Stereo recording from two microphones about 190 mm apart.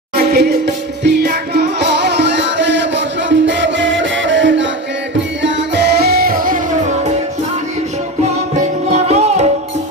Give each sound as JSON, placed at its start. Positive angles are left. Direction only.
{"t": 0.3, "sound": "music", "side_deg": -55}
{"t": 8.9, "sound": "music", "side_deg": -35}